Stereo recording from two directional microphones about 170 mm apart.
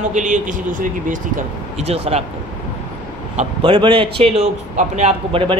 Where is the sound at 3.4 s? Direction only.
30° right (ahead or behind).